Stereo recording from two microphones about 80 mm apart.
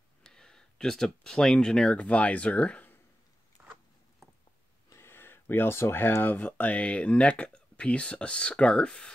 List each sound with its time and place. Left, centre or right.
0.2 s speech: centre
3.6 s zipper: centre
4.8 s speech: left; by 9.1 s centre